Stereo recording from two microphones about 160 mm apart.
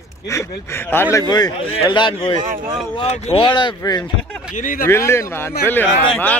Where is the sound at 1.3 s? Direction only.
25° left (ahead or behind).